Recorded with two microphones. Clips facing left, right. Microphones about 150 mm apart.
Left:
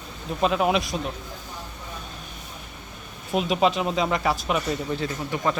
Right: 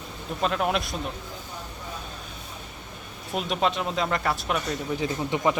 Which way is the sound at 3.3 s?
5° left (ahead or behind).